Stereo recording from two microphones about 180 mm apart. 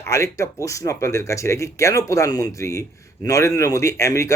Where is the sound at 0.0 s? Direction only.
15° left (ahead or behind).